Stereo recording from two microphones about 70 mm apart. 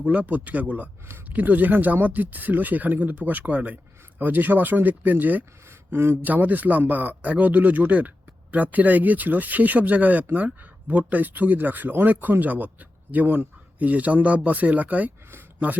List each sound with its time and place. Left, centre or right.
0.0 s speech: right